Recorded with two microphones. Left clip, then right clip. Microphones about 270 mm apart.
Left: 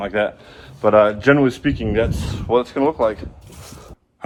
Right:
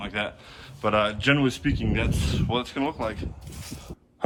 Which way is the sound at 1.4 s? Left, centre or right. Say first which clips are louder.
Left 7 dB; centre.